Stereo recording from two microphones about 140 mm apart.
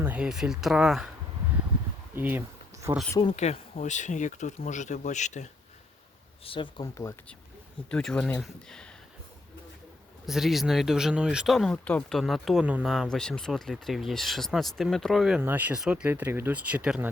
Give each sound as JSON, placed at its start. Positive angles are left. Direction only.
{"t": 0.0, "sound": "speech", "side_deg": -10}
{"t": 2.1, "sound": "speech", "side_deg": -15}
{"t": 3.3, "sound": "speech", "side_deg": 55}
{"t": 6.4, "sound": "speech", "side_deg": 40}
{"t": 7.9, "sound": "speech", "side_deg": 5}
{"t": 10.2, "sound": "speech", "side_deg": 0}
{"t": 15.4, "sound": "speech", "side_deg": -15}